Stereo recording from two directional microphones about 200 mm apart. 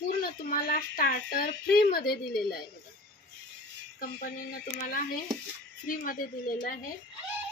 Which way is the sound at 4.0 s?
45° left (ahead or behind).